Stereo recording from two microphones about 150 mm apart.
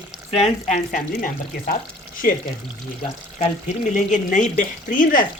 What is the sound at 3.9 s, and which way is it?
Speech, 55° left (ahead or behind).